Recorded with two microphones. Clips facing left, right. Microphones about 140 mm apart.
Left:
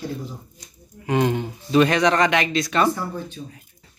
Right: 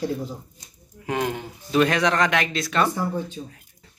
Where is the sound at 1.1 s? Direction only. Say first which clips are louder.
Left 5 dB; centre (ahead or behind).